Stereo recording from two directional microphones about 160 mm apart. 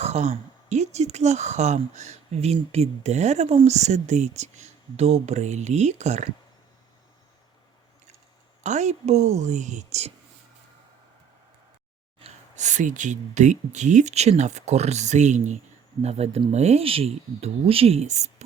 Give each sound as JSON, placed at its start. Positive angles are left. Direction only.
{"t": 0.0, "sound": "speech", "side_deg": -45}
{"t": 8.6, "sound": "speech", "side_deg": -45}
{"t": 12.2, "sound": "speech", "side_deg": -50}